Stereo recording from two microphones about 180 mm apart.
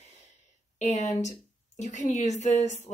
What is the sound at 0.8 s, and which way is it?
Speech, 40° left (ahead or behind).